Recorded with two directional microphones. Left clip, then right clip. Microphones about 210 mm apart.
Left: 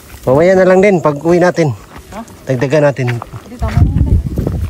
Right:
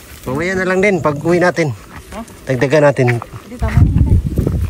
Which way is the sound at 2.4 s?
15° left (ahead or behind).